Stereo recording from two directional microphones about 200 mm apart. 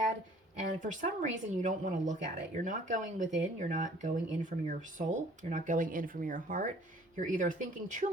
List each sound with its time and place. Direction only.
0.7 s speech: 40° right (ahead or behind)